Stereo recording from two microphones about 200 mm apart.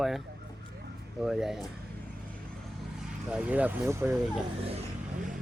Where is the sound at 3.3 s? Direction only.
5° right (ahead or behind).